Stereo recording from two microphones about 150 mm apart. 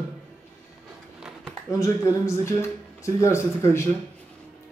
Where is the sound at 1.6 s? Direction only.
20° left (ahead or behind).